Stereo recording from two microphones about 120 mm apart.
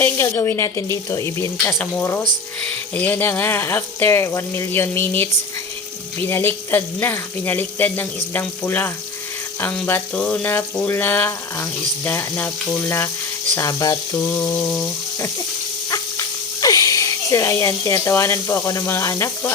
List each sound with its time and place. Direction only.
0.0 s speech: 20° left (ahead or behind)
14.2 s speech: 20° left (ahead or behind)
15.9 s speech: 30° left (ahead or behind)